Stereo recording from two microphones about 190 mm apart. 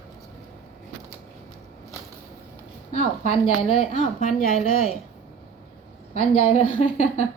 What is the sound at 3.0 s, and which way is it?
A woman's voice, 35° left (ahead or behind).